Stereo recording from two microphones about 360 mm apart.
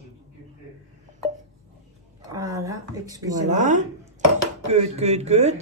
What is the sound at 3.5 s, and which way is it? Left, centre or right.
Speech, centre.